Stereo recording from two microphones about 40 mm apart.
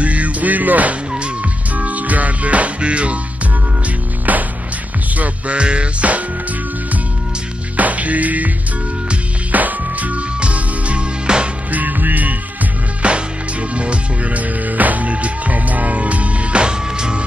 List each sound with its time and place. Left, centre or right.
0.0 s music: right
1.1 s music: right
4.3 s music: right
5.6 s music: right
7.7 s music: right
9.5 s music: right
11.7 s music: right
13.0 s music: right
16.6 s music: right